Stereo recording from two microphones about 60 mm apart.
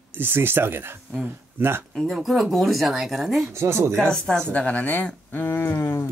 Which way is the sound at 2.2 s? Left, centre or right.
Centre.